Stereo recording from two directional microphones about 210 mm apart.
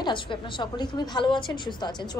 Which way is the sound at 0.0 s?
20° left (ahead or behind).